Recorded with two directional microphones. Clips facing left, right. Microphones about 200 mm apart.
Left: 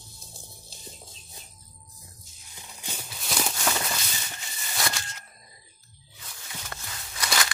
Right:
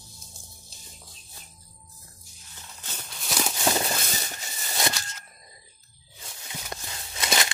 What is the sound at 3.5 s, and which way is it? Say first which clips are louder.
Walk: right 4 dB; 30° right (ahead or behind).